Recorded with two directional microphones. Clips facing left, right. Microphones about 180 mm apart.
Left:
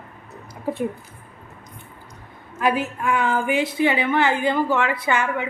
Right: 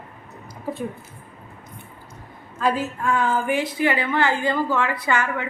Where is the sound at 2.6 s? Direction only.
20° left (ahead or behind).